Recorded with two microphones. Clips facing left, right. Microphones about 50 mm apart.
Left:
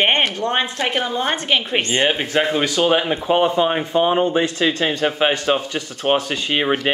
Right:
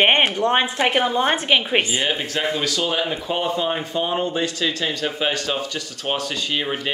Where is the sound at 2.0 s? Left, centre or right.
Left.